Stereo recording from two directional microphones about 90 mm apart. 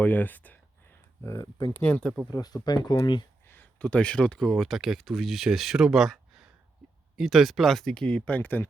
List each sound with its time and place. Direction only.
0.0 s speech: 20° left (ahead or behind)
1.2 s speech: 35° left (ahead or behind)
1.8 s speech: 15° left (ahead or behind)
2.3 s speech: 45° left (ahead or behind)
3.4 s speech: 20° left (ahead or behind)